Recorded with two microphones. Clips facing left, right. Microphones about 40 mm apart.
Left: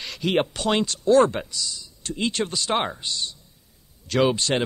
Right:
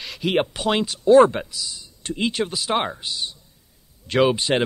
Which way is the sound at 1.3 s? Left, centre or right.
Centre.